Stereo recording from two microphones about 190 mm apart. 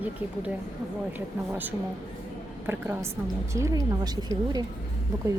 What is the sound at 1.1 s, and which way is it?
Speech, 10° right (ahead or behind).